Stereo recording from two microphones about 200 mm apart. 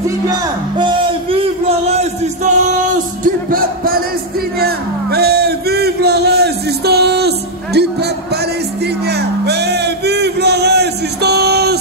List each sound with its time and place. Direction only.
0.3 s music: 25° right (ahead or behind); by 7.9 s 55° right (ahead or behind)
9.4 s music: 55° right (ahead or behind)